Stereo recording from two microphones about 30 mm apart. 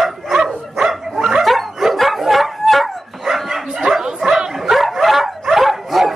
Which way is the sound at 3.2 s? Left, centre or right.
Centre.